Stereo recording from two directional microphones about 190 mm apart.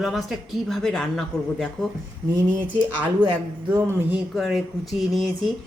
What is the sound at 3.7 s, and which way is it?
Speech, 10° right (ahead or behind).